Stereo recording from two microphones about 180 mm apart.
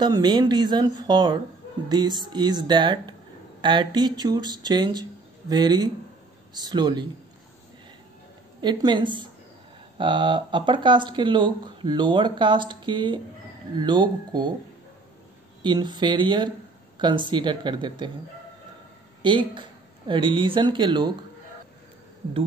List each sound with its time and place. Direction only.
0.0 s speech: 25° right (ahead or behind)
8.5 s speech: 25° right (ahead or behind)
15.6 s speech: 25° right (ahead or behind)
19.2 s speech: 25° right (ahead or behind)